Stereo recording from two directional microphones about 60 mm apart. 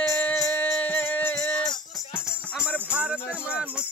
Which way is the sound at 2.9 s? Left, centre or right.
Right.